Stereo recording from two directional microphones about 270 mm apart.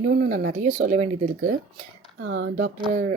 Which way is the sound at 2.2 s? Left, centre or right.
Right.